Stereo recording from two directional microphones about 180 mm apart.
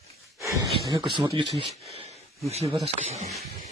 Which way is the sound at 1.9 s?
35° right (ahead or behind).